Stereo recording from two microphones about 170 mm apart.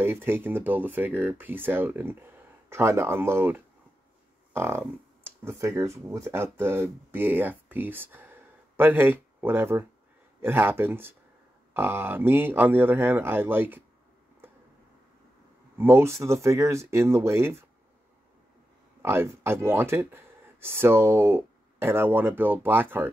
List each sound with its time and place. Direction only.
0.0 s speech: 15° right (ahead or behind)
15.8 s speech: 15° right (ahead or behind)
19.0 s speech: 15° right (ahead or behind)